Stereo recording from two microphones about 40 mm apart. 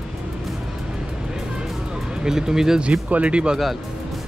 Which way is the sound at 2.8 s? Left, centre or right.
Right.